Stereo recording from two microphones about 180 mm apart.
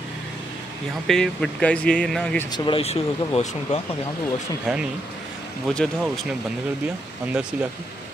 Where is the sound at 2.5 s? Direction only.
25° left (ahead or behind).